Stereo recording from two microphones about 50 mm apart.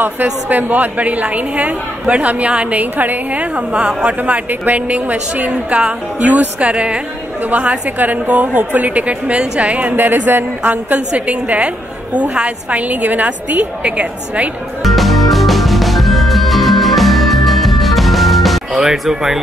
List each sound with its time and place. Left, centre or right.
0.0 s a woman's voice: right
4.2 s a woman's voice: right
9.9 s speech: right
11.0 s a woman's voice: right
14.8 s music: centre
18.8 s speech: centre